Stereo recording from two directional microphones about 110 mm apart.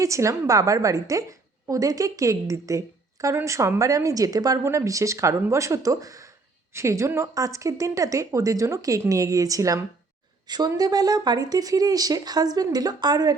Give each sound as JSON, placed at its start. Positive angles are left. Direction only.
{"t": 0.0, "sound": "a woman's voice", "side_deg": -30}